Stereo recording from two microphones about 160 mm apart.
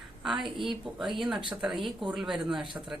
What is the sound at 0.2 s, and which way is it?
Speech, centre (ahead or behind).